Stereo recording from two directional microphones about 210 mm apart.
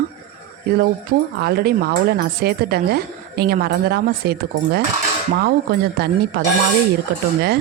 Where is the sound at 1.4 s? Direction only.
50° right (ahead or behind).